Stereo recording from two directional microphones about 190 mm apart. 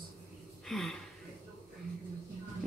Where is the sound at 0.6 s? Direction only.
Centre (ahead or behind).